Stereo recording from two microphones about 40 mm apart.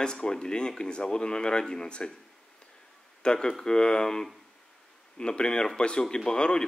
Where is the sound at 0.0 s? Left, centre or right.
Centre.